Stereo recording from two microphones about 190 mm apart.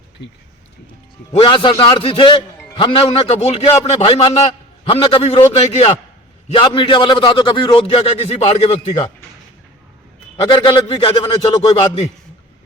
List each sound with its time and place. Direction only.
1.3 s a man's voice: 30° left (ahead or behind)
10.4 s a man's voice: 25° left (ahead or behind)